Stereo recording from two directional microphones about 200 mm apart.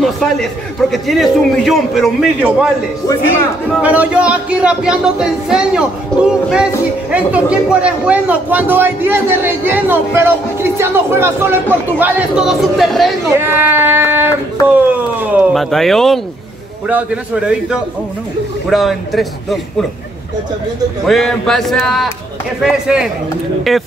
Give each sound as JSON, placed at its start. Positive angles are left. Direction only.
{"t": 0.0, "sound": "a man's voice", "side_deg": 0}
{"t": 3.7, "sound": "a man's voice", "side_deg": -5}
{"t": 7.2, "sound": "a man's voice", "side_deg": -5}
{"t": 13.3, "sound": "a man's voice", "side_deg": -10}
{"t": 21.1, "sound": "a man's voice", "side_deg": 0}